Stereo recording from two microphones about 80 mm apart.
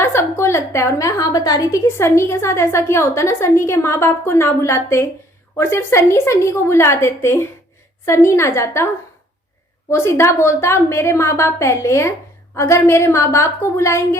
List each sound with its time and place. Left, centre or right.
0.0 s a woman's voice: left
1.9 s a woman's voice: left
9.9 s a woman's voice: left